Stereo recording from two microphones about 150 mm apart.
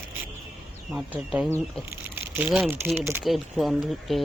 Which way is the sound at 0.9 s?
5° right (ahead or behind).